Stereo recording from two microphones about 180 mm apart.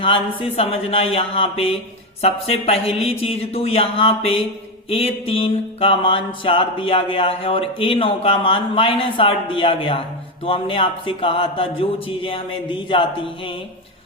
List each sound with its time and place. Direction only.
0.0 s speech: 30° left (ahead or behind)
4.9 s mantra: 30° left (ahead or behind)